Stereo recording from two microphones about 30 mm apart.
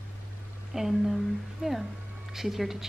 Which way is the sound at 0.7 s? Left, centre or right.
Centre.